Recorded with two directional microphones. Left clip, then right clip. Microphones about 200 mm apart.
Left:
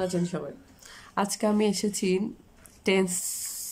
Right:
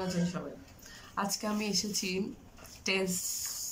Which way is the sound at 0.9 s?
50° left (ahead or behind).